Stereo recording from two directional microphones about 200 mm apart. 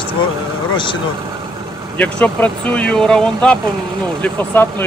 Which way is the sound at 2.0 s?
5° left (ahead or behind).